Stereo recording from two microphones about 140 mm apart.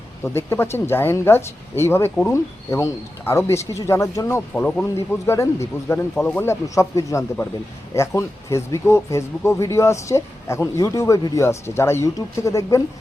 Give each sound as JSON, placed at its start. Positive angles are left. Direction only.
{"t": 0.3, "sound": "speech", "side_deg": 20}